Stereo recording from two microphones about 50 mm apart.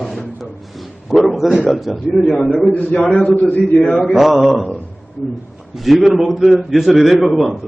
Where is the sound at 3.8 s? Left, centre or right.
Centre.